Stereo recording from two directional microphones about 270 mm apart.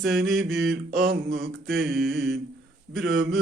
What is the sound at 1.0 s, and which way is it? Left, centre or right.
Mantra, right.